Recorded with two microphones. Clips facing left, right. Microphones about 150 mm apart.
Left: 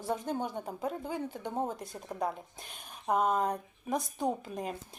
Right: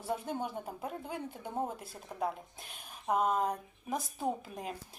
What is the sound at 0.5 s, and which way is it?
A woman's voice, centre (ahead or behind).